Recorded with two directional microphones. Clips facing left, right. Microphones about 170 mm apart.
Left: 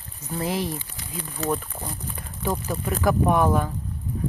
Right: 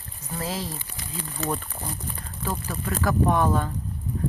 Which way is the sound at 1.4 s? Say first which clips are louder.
Left 3 dB; centre (ahead or behind).